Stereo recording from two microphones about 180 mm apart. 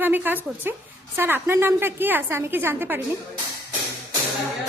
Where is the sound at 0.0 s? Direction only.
10° right (ahead or behind).